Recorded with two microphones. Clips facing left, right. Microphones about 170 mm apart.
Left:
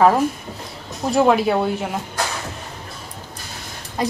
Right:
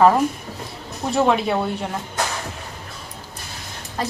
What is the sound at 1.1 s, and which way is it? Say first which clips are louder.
Speech: left 3 dB; 5° left (ahead or behind).